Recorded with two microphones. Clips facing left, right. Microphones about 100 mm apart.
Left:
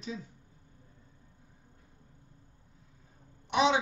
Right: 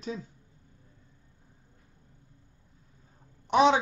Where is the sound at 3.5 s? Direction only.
40° right (ahead or behind).